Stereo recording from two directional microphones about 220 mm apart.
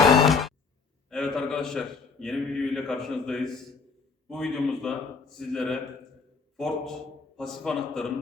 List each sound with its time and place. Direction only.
0.3 s music: centre (ahead or behind)
1.1 s a man's voice: centre (ahead or behind)